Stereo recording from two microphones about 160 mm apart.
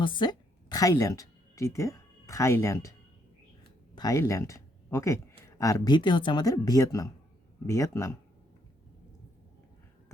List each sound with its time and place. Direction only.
0.0 s speech: 30° left (ahead or behind)
3.9 s speech: 20° left (ahead or behind)